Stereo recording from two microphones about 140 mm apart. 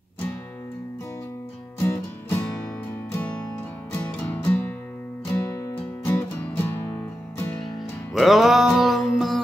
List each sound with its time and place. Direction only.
1.8 s music: 15° left (ahead or behind)
3.9 s music: 15° left (ahead or behind)
8.1 s music: centre (ahead or behind)